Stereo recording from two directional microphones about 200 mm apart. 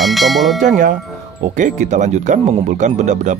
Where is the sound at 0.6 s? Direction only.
40° right (ahead or behind).